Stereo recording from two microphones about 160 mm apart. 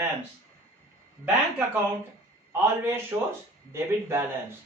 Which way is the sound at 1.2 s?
10° right (ahead or behind).